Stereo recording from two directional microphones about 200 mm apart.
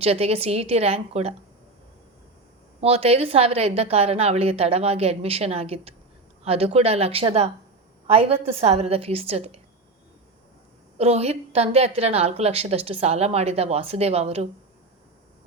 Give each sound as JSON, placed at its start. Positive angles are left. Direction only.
{"t": 0.0, "sound": "a woman's voice", "side_deg": -30}
{"t": 2.8, "sound": "a woman's voice", "side_deg": -30}
{"t": 10.9, "sound": "a woman's voice", "side_deg": -30}